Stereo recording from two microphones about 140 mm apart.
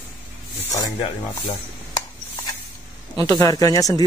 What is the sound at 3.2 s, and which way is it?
Speech, 25° left (ahead or behind).